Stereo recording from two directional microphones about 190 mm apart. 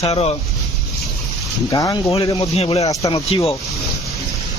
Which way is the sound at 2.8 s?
20° left (ahead or behind).